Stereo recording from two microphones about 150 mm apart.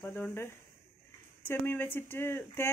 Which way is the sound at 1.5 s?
15° left (ahead or behind).